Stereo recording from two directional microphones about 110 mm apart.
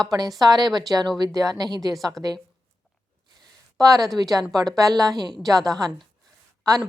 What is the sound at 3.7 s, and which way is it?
Speech, 35° right (ahead or behind).